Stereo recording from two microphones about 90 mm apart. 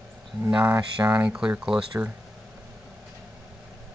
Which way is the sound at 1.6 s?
10° right (ahead or behind).